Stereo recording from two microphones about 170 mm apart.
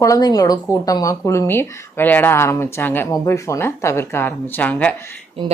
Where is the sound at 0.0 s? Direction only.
20° left (ahead or behind).